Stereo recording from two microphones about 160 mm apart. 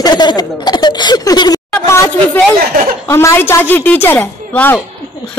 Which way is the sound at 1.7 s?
15° left (ahead or behind).